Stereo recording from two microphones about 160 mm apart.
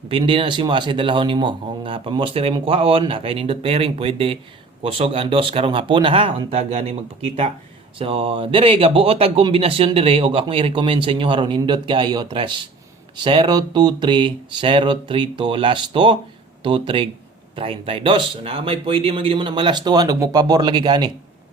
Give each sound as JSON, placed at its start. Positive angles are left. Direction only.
{"t": 0.1, "sound": "a man's voice", "side_deg": -35}